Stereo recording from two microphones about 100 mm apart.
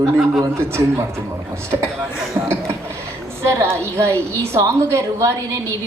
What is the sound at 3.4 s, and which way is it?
A man's voice, 30° right (ahead or behind).